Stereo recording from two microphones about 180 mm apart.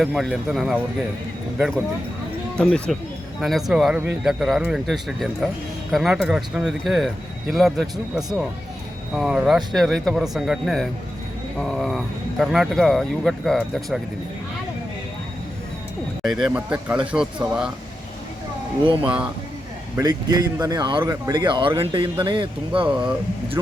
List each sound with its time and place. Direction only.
0.0 s speech: centre (ahead or behind)
16.2 s speech: centre (ahead or behind)
19.0 s speech: 5° right (ahead or behind)
20.0 s speech: 20° right (ahead or behind)
22.9 s speech: 5° right (ahead or behind)